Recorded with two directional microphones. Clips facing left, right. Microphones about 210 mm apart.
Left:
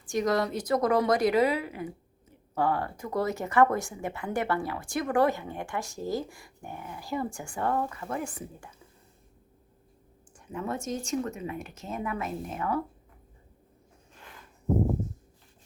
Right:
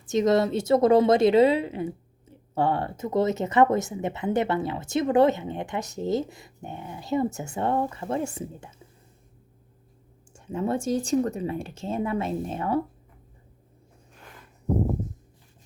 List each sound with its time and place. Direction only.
0.0 s speech: 20° right (ahead or behind)
10.3 s speech: 25° right (ahead or behind)